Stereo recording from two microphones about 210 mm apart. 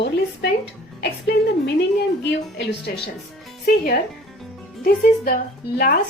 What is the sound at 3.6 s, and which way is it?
Speech, 45° left (ahead or behind).